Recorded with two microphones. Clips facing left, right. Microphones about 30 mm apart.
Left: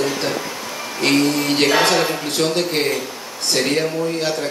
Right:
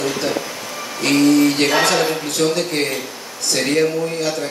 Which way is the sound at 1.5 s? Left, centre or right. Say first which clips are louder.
Left 1 dB; centre.